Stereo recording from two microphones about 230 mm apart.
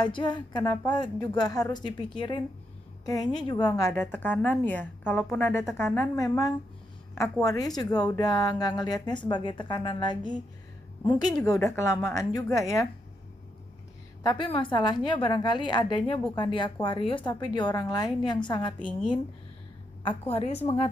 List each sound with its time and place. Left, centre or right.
0.0 s a woman's voice: centre
11.4 s speech: centre
14.2 s a woman's voice: left
20.0 s a woman's voice: left